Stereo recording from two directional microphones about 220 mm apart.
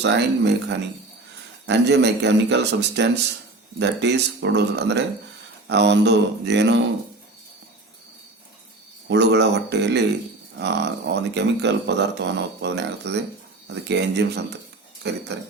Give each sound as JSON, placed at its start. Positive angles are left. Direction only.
{"t": 0.0, "sound": "speech", "side_deg": -50}
{"t": 9.0, "sound": "speech", "side_deg": -50}